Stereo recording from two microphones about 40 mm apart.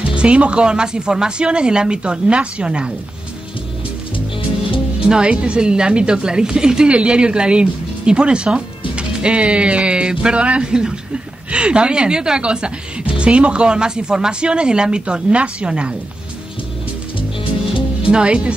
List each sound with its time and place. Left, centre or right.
0.0 s a woman's voice: right
5.0 s a woman's voice: right
18.2 s a woman's voice: right